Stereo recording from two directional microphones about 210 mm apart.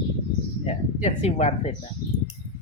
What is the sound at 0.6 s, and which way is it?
Speech, 30° left (ahead or behind).